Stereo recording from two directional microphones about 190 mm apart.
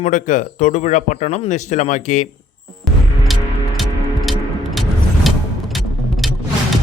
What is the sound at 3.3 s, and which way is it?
Music, centre (ahead or behind).